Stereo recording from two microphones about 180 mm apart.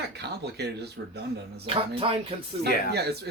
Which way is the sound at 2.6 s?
65° right (ahead or behind).